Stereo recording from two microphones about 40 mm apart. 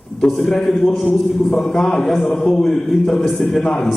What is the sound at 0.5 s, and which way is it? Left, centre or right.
A man's voice, centre.